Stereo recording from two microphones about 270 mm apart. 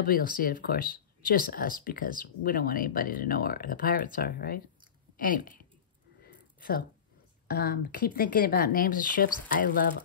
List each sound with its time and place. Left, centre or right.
0.0 s speech: left
6.6 s speech: left